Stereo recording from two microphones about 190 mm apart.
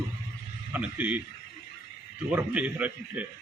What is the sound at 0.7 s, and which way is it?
Speech, 10° right (ahead or behind).